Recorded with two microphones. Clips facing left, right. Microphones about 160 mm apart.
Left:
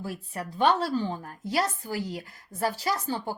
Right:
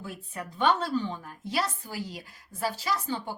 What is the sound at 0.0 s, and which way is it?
A woman's voice, 35° left (ahead or behind).